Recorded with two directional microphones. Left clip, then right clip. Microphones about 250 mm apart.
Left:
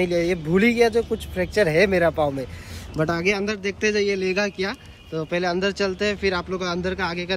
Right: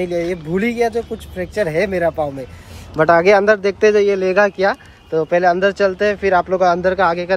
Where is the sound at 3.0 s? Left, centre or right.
Centre.